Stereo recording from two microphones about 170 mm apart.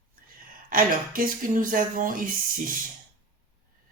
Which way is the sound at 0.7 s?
55° right (ahead or behind).